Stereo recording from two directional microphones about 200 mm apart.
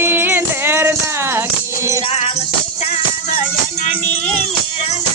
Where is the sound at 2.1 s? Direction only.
30° left (ahead or behind).